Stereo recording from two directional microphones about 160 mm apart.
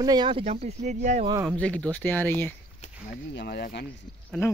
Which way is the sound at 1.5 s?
5° left (ahead or behind).